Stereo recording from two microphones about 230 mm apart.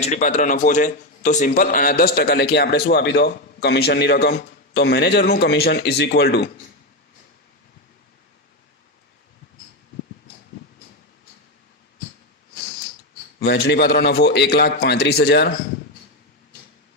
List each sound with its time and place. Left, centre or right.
0.0 s a man's voice: left
13.4 s a man's voice: left